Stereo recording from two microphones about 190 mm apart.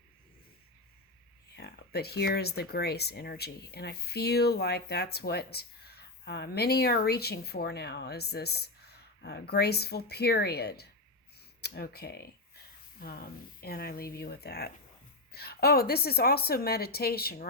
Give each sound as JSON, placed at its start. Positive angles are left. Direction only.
{"t": 1.5, "sound": "speech", "side_deg": 60}